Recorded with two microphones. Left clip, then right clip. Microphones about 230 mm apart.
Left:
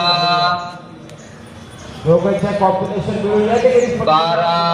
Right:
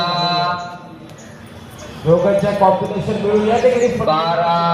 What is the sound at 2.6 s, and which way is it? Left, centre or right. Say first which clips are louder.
Speech: right 1 dB; right.